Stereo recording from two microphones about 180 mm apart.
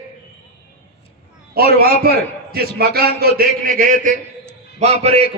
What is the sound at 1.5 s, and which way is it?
A man's voice, 60° right (ahead or behind).